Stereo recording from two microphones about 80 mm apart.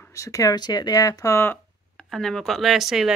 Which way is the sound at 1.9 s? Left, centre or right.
Centre.